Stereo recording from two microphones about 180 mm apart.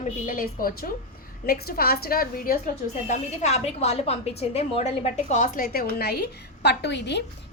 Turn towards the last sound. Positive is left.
turn(degrees=70)  # may be behind; listen again after turning